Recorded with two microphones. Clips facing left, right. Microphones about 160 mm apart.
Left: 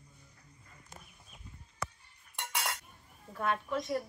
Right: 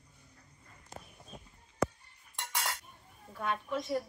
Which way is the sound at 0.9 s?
40° right (ahead or behind).